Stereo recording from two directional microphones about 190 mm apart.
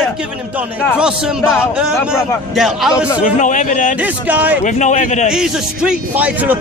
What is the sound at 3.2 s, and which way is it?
Speech, 40° left (ahead or behind).